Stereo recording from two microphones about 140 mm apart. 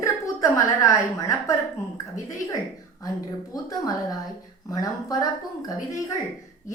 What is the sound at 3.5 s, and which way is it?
A woman's voice, 25° left (ahead or behind).